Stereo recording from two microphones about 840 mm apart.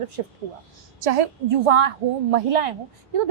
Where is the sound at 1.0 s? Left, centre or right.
Right.